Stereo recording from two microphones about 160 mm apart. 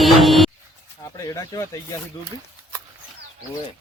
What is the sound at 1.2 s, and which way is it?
Speech, 20° left (ahead or behind).